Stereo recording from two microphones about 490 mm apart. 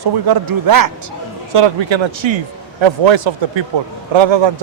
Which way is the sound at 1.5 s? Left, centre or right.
Right.